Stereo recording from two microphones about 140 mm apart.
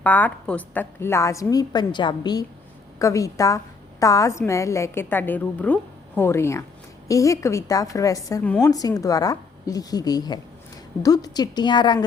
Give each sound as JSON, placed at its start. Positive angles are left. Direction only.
{"t": 0.0, "sound": "a woman's voice", "side_deg": 10}